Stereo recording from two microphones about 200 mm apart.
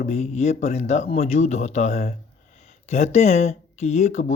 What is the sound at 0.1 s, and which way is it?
Speech, 35° left (ahead or behind).